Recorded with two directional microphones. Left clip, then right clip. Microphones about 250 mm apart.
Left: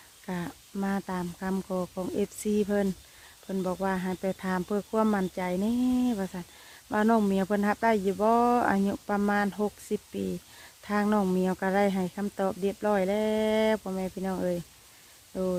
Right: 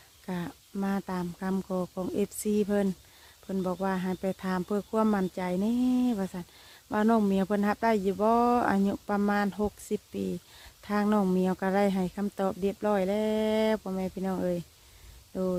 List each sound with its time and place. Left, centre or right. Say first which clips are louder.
0.3 s speech: left 1 dB; centre